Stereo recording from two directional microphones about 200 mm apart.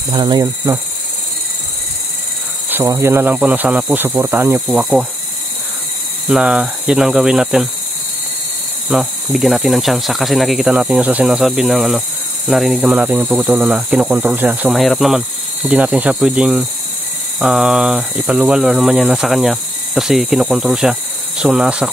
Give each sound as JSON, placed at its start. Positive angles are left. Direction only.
{"t": 0.1, "sound": "insect", "side_deg": -20}
{"t": 2.7, "sound": "speech", "side_deg": -15}
{"t": 6.2, "sound": "speech", "side_deg": -5}
{"t": 8.9, "sound": "speech", "side_deg": 0}